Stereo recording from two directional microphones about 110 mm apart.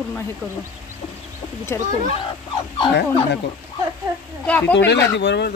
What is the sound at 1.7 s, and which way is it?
Speech, 25° left (ahead or behind).